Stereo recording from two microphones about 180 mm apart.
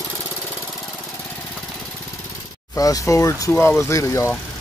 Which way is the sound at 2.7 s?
20° left (ahead or behind).